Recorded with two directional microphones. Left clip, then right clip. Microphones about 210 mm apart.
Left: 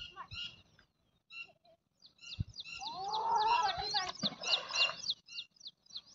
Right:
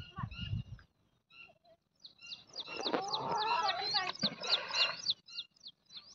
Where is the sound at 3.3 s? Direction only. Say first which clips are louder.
Left 3 dB; 45° right (ahead or behind).